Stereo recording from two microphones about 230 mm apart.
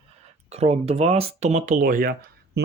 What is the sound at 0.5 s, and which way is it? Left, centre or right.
Speech, right.